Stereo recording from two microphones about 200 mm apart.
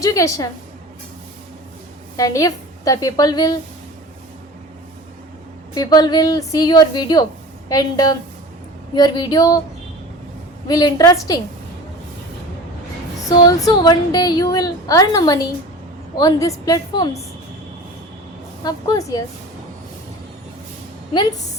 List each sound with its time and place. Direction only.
0.0 s a woman's voice: 15° left (ahead or behind)
2.1 s a woman's voice: 15° left (ahead or behind)
5.7 s a woman's voice: 20° left (ahead or behind)
10.7 s a woman's voice: 20° left (ahead or behind)
13.4 s a woman's voice: 15° left (ahead or behind)
18.6 s a woman's voice: 20° left (ahead or behind)